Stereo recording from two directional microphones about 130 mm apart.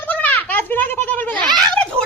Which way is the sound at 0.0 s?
10° left (ahead or behind).